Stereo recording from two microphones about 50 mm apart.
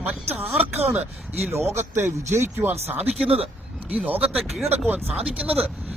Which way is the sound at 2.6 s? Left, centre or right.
Right.